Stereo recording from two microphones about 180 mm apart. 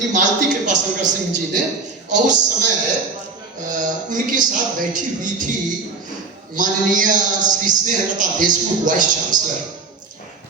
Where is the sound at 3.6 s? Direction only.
45° right (ahead or behind).